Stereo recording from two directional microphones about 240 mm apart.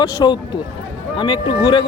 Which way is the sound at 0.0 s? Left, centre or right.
Centre.